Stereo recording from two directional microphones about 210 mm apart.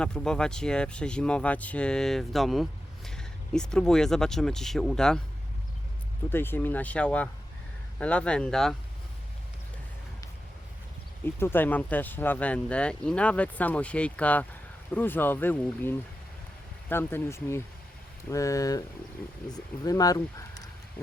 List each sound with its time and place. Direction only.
0.0 s speech: 5° left (ahead or behind)
6.3 s speech: 10° left (ahead or behind)
11.3 s speech: 10° left (ahead or behind)
19.8 s speech: 15° left (ahead or behind)